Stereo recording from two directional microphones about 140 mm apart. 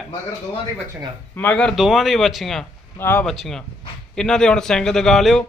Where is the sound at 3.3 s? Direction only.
5° left (ahead or behind).